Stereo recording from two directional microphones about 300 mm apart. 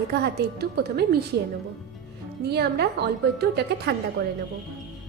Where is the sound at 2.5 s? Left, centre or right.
Right.